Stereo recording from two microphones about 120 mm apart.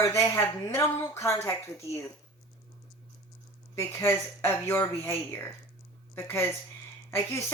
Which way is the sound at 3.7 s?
20° left (ahead or behind).